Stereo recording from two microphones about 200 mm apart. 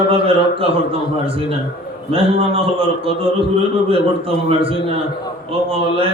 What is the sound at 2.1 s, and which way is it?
A man's voice, 30° right (ahead or behind).